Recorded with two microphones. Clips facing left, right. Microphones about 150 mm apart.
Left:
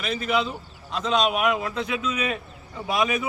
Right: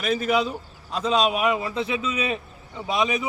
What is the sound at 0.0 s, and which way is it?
A man's voice, 45° right (ahead or behind).